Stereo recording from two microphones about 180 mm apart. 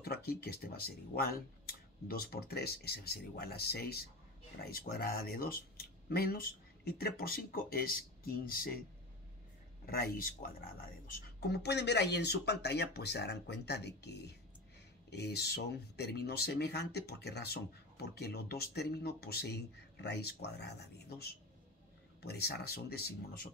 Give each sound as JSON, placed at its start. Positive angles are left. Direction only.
{"t": 0.0, "sound": "speech", "side_deg": 60}
{"t": 9.8, "sound": "speech", "side_deg": 55}
{"t": 11.1, "sound": "speech", "side_deg": 65}